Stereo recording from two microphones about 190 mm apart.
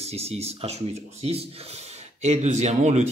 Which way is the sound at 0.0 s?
35° right (ahead or behind).